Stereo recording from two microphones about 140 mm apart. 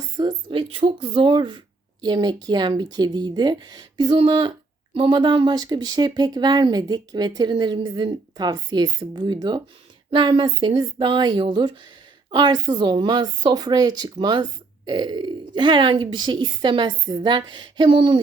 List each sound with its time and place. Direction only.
0.0 s speech: 30° right (ahead or behind)